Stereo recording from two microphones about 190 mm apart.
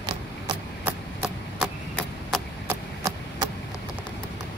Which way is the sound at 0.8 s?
Centre (ahead or behind).